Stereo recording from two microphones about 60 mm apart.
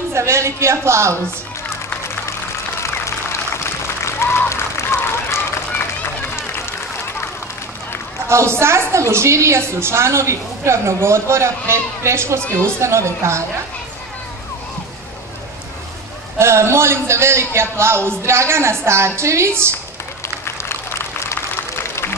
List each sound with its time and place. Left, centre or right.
0.1 s a woman's voice: right
2.8 s applause: left
8.3 s a woman's voice: right
16.3 s a woman's voice: right
21.2 s applause: left